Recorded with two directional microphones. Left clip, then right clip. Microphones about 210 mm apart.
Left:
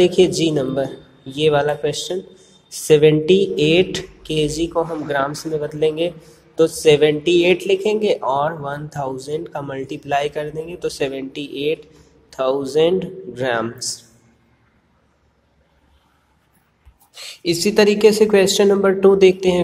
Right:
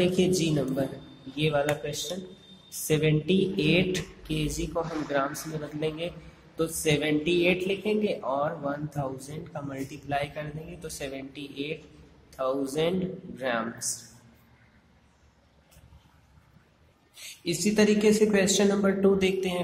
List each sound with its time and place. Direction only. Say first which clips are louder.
0.0 s speech: left 11 dB; 20° left (ahead or behind)
17.1 s speech: left 11 dB; 20° left (ahead or behind)